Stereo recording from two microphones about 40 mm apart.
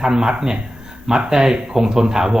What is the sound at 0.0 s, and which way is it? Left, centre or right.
Speech, centre.